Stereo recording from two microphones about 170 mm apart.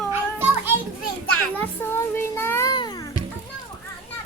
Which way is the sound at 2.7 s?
25° left (ahead or behind).